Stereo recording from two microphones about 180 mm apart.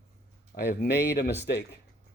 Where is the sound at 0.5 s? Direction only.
65° left (ahead or behind).